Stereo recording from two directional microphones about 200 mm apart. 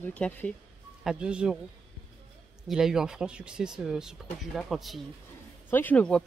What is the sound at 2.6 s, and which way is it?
Speech, centre (ahead or behind).